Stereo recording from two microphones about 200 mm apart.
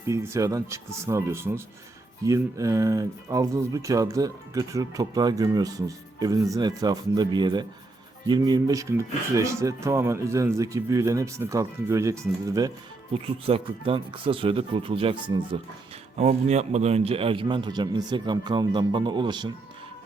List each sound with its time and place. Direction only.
0.1 s a man's voice: 15° right (ahead or behind)
13.2 s a man's voice: 30° right (ahead or behind)
16.1 s a man's voice: 35° right (ahead or behind)